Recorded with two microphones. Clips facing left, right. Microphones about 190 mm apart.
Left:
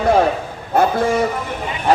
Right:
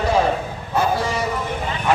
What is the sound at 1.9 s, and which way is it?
Speech, 35° left (ahead or behind).